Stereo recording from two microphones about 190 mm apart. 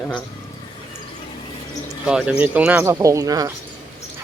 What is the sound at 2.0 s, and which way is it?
Speech, 5° right (ahead or behind).